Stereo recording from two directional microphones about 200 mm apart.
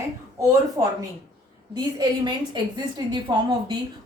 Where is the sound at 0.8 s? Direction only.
15° right (ahead or behind).